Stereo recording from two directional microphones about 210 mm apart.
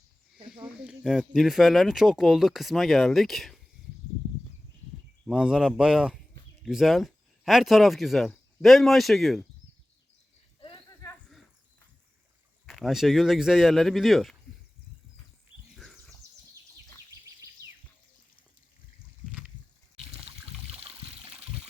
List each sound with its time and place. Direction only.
0.4 s speech: 5° right (ahead or behind)
5.2 s speech: 5° right (ahead or behind)
10.6 s a sound: 25° left (ahead or behind)
12.6 s speech: centre (ahead or behind)
15.7 s a sound: centre (ahead or behind)
20.3 s trickle: 30° right (ahead or behind)